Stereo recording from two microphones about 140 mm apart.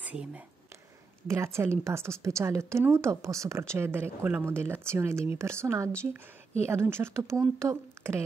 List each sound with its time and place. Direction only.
0.0 s speech: 10° right (ahead or behind)
1.2 s a woman's voice: 20° right (ahead or behind)